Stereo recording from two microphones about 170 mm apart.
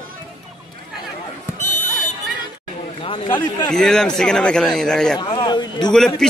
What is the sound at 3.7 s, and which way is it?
A man's voice, 5° left (ahead or behind).